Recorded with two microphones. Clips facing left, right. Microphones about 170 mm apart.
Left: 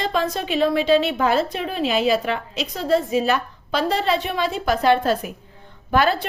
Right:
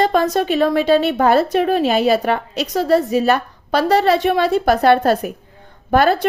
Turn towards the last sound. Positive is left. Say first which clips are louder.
# right 5 dB
turn(degrees=-45)  # may be behind; listen again after turning